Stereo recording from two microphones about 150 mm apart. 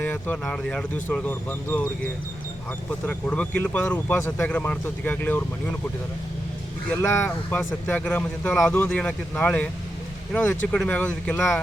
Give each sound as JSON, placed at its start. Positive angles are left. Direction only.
{"t": 0.0, "sound": "speech", "side_deg": 10}
{"t": 3.1, "sound": "speech", "side_deg": 10}
{"t": 6.9, "sound": "speech", "side_deg": 15}
{"t": 7.3, "sound": "speech", "side_deg": 5}